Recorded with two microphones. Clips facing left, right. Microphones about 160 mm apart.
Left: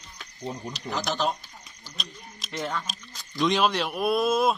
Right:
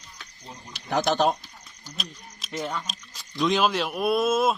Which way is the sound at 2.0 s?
Centre (ahead or behind).